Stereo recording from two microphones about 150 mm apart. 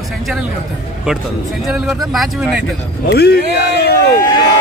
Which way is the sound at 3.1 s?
90° left.